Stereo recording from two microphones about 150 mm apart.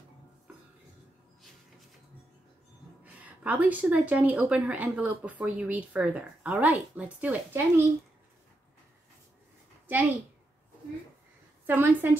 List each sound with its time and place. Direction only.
3.0 s a woman's voice: 10° right (ahead or behind)
11.6 s a woman's voice: 15° right (ahead or behind)